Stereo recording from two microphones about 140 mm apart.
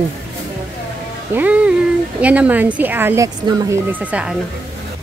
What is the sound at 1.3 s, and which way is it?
A woman's voice, 10° right (ahead or behind).